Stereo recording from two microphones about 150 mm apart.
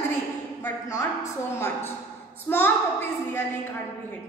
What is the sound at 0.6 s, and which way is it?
A woman's voice, 15° left (ahead or behind).